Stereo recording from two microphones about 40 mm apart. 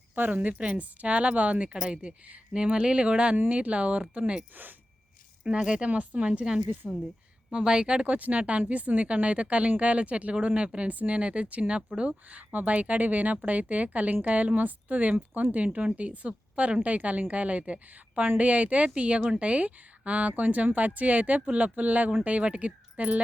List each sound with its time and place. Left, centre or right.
0.2 s a woman's voice: right
5.6 s a woman's voice: right
8.0 s a woman's voice: right
10.8 s a woman's voice: right
11.9 s speech: right
12.3 s a woman's voice: right